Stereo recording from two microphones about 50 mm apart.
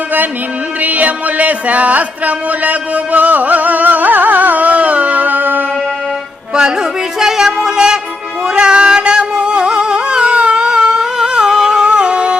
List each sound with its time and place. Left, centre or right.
0.8 s music: right
6.5 s music: centre